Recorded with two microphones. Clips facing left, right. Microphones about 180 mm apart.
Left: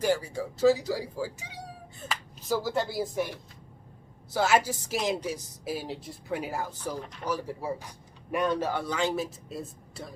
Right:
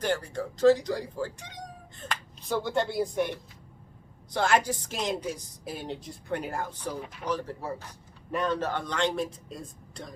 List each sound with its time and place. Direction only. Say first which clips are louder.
0.0 s speech: left 2 dB; 10° left (ahead or behind)
7.0 s speech: right 1 dB; 5° right (ahead or behind)
7.3 s speech: even; 10° left (ahead or behind)